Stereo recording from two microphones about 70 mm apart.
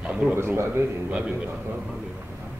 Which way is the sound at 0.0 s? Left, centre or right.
Centre.